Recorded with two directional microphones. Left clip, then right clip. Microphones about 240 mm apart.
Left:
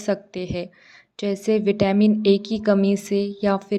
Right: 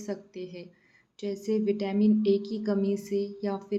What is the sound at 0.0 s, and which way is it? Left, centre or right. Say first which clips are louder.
Speech: left 12 dB; left.